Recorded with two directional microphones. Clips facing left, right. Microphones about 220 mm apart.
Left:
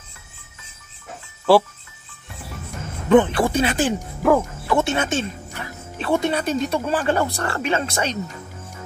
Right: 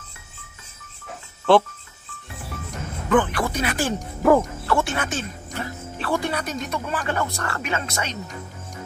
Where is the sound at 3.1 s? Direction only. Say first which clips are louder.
Left 5 dB; 25° left (ahead or behind).